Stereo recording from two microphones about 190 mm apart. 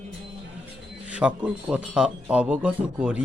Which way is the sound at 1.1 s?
5° right (ahead or behind).